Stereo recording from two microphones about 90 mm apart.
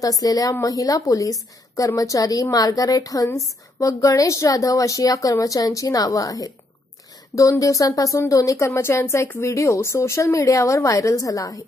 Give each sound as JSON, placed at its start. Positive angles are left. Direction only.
{"t": 0.0, "sound": "speech", "side_deg": 40}